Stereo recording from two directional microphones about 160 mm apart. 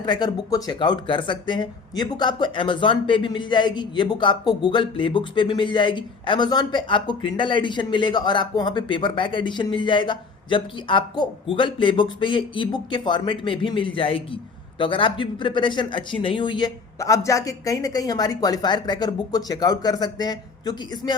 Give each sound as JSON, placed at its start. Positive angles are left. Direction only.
{"t": 0.0, "sound": "speech", "side_deg": 25}